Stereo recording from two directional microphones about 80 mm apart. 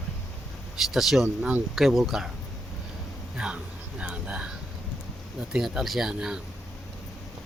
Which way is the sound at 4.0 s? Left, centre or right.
Centre.